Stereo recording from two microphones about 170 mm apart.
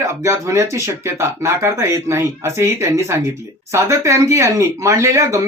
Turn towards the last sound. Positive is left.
turn(degrees=-20)  # may be behind; listen again after turning